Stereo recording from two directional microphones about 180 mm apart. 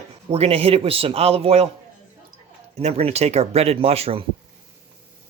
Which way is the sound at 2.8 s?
35° right (ahead or behind).